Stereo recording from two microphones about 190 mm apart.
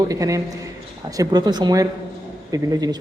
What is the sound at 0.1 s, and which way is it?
A man's voice, 15° right (ahead or behind).